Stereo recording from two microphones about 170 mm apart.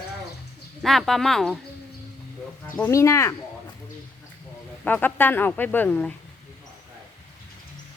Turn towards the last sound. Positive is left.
turn(degrees=5)  # may be behind; listen again after turning